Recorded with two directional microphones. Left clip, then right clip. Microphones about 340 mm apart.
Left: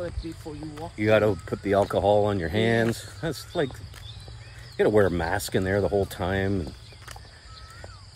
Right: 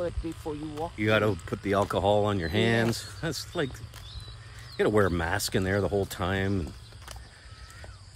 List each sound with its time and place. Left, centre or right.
0.0 s speech: centre
4.7 s speech: centre